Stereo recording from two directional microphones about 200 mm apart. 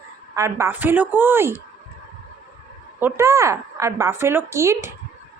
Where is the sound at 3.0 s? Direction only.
15° right (ahead or behind).